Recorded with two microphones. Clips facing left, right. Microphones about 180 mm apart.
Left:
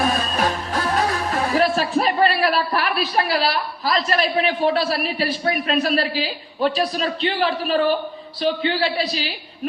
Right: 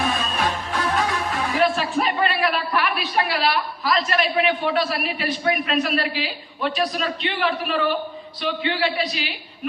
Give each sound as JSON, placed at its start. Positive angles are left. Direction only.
{"t": 0.0, "sound": "music", "side_deg": 40}
{"t": 5.5, "sound": "a woman's voice", "side_deg": 35}